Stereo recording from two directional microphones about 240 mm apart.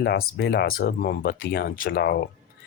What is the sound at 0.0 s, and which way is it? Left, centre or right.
Speech, left.